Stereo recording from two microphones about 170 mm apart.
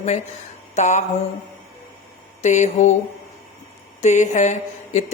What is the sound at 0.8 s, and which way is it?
Speech, 45° left (ahead or behind).